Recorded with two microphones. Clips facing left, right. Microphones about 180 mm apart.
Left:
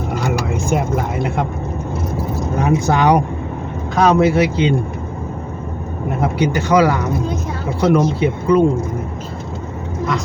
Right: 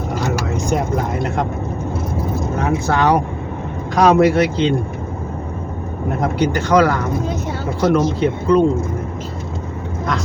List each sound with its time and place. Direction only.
2.6 s speech: 15° left (ahead or behind)
3.9 s speech: centre (ahead or behind)
6.4 s speech: 10° left (ahead or behind)